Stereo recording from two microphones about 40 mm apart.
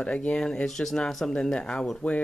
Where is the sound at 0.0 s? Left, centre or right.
Left.